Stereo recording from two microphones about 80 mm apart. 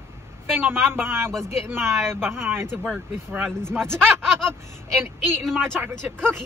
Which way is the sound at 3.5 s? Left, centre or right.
Centre.